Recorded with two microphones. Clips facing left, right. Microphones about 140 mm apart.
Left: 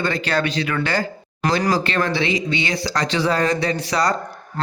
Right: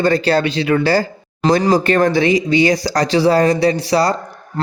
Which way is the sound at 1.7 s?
45° right (ahead or behind).